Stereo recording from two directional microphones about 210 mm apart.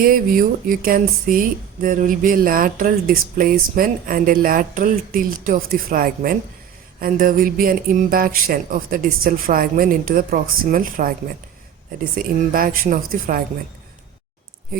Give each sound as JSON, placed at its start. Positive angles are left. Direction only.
{"t": 0.0, "sound": "speech", "side_deg": -40}
{"t": 12.1, "sound": "speech", "side_deg": -40}